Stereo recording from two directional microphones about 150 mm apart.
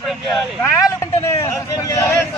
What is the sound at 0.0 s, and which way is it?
Speech, centre (ahead or behind).